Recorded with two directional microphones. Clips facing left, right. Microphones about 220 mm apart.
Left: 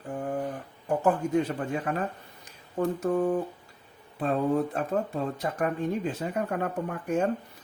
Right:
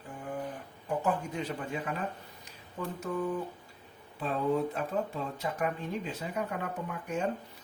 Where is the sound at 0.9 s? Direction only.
50° left (ahead or behind).